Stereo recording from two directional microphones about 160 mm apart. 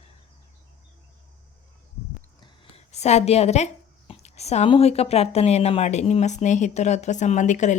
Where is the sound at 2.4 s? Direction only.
40° left (ahead or behind).